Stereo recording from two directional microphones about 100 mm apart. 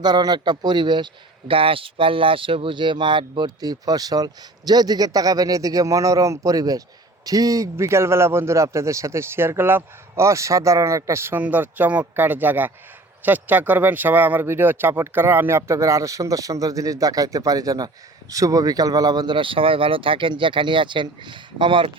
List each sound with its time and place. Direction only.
0.0 s speech: 45° right (ahead or behind)